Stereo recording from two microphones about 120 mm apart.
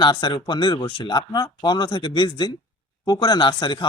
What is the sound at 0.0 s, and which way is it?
Speech, 40° left (ahead or behind).